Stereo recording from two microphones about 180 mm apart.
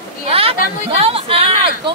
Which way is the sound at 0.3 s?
30° right (ahead or behind).